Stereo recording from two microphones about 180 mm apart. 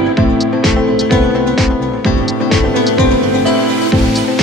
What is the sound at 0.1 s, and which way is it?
Music, centre (ahead or behind).